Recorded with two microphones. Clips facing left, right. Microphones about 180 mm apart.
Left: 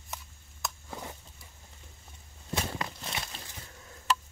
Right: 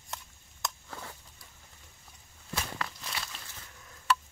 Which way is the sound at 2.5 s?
25° left (ahead or behind).